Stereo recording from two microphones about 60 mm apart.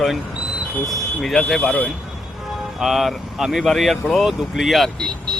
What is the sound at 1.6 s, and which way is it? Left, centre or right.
Speech, centre.